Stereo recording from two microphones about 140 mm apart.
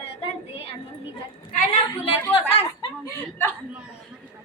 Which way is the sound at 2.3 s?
40° left (ahead or behind).